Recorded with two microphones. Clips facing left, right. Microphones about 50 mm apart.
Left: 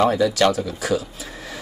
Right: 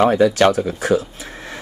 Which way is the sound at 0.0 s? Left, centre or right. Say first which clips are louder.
Right 4 dB; right.